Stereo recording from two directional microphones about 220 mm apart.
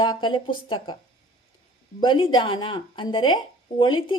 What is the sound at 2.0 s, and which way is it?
Speech, 20° left (ahead or behind).